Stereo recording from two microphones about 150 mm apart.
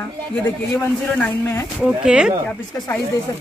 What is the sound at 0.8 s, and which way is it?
Speech, 15° left (ahead or behind).